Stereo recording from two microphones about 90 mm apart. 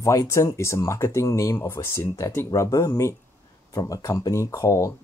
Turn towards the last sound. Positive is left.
turn(degrees=35)  # may be behind; listen again after turning